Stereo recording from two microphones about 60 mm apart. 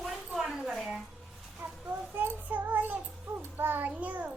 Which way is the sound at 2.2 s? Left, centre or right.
Right.